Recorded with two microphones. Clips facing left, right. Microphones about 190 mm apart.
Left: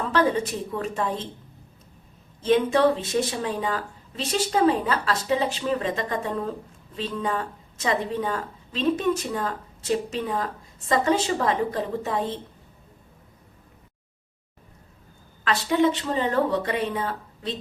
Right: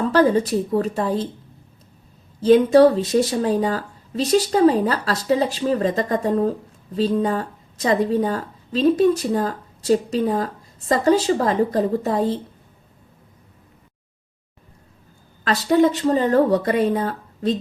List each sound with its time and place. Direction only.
0.0 s a woman's voice: 35° right (ahead or behind)
2.4 s a woman's voice: 40° right (ahead or behind)
15.4 s a woman's voice: 40° right (ahead or behind)